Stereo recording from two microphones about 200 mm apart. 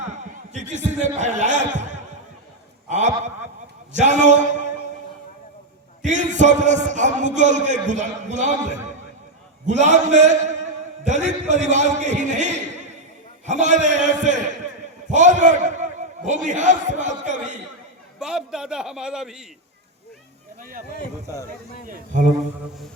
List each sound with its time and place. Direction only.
0.0 s a man's voice: 35° right (ahead or behind)
6.1 s a man's voice: 35° right (ahead or behind)
18.2 s a man's voice: 5° right (ahead or behind)
20.6 s speech: 45° right (ahead or behind)